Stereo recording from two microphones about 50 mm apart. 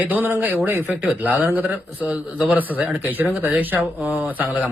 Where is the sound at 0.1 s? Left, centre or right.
Right.